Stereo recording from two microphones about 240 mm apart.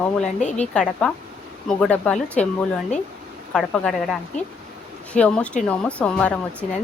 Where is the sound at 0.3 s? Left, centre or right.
Left.